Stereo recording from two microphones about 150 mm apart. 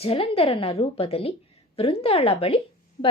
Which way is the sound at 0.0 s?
40° left (ahead or behind).